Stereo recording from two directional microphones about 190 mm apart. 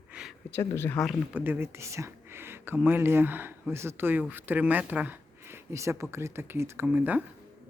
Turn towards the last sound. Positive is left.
turn(degrees=-10)  # may be behind; listen again after turning